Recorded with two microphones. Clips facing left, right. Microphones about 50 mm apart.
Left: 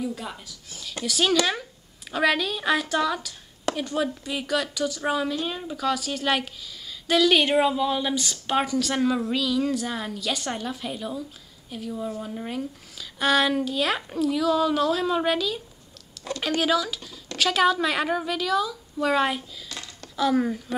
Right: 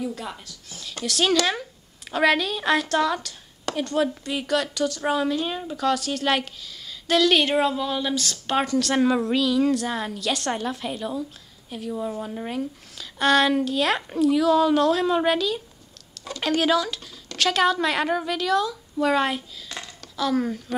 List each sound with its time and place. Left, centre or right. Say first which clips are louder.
0.1 s a woman's voice: right 1 dB; centre
8.9 s a woman's voice: right 4 dB; centre
20.2 s speech: left 1 dB; centre